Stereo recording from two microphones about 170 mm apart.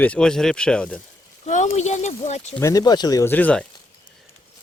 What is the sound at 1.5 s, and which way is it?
Speech, 45° left (ahead or behind).